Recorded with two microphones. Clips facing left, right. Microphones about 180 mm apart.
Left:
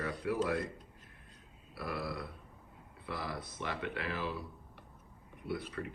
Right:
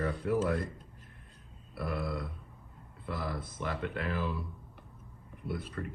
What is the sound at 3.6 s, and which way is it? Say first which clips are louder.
Speech: right 3 dB; 50° right (ahead or behind).